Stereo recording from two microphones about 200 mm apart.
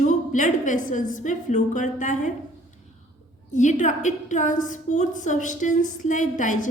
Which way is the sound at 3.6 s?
35° left (ahead or behind).